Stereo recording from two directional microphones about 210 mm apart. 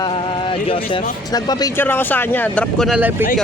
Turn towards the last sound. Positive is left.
turn(degrees=-5)  # may be behind; listen again after turning